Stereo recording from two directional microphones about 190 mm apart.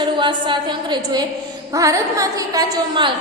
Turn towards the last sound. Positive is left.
turn(degrees=-25)  # may be behind; listen again after turning